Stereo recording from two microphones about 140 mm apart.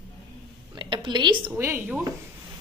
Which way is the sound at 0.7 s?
35° right (ahead or behind).